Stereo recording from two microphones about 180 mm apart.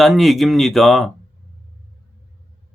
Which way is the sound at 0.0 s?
Centre (ahead or behind).